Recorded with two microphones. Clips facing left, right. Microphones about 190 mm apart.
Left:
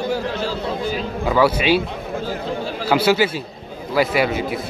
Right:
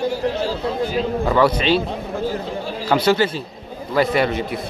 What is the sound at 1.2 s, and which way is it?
Speech, 5° left (ahead or behind).